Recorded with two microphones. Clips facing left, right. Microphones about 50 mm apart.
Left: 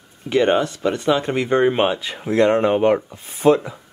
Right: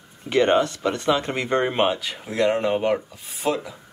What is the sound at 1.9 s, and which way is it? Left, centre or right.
Speech, left.